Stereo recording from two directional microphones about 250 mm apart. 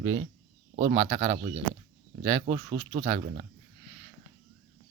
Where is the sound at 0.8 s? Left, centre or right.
Right.